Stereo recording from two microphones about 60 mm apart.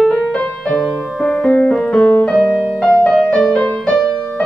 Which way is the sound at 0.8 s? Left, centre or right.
Centre.